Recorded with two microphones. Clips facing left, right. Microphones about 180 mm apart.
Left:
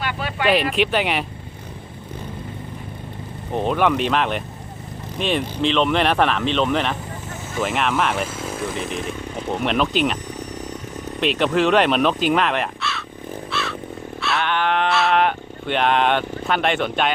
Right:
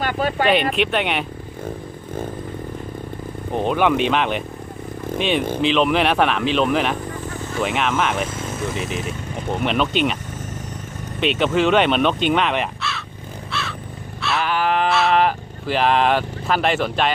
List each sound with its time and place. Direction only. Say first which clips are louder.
0.0 s a sound: right 5 dB; 45° right (ahead or behind)
0.4 s speech: left 2 dB; centre (ahead or behind)
3.5 s speech: right 1 dB; centre (ahead or behind)
5.6 s speech: even; 5° right (ahead or behind)
11.2 s speech: even; centre (ahead or behind)
13.5 s crow: left 1 dB; centre (ahead or behind)
14.2 s cattle: right 1 dB; centre (ahead or behind)